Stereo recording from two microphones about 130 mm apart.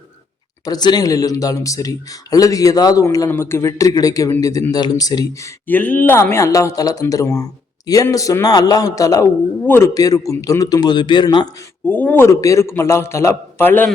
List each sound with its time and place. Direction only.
0.6 s speech: 30° left (ahead or behind)
5.6 s a man's voice: 15° left (ahead or behind); by 11.4 s 35° left (ahead or behind)
11.9 s speech: 15° left (ahead or behind)